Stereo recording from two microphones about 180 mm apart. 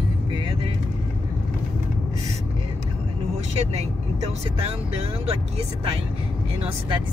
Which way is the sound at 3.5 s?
35° right (ahead or behind).